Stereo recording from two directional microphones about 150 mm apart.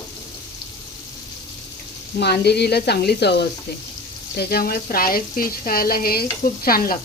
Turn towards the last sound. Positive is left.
turn(degrees=75)  # may be behind; listen again after turning